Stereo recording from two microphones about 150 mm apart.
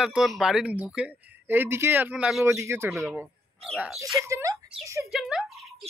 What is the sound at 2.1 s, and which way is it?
Speech, 5° right (ahead or behind).